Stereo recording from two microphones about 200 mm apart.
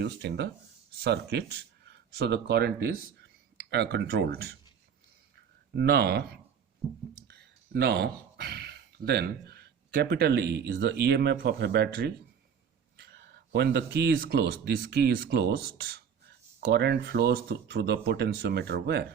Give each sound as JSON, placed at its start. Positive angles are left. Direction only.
{"t": 0.0, "sound": "speech", "side_deg": -55}
{"t": 5.7, "sound": "speech", "side_deg": -55}
{"t": 7.3, "sound": "speech", "side_deg": -55}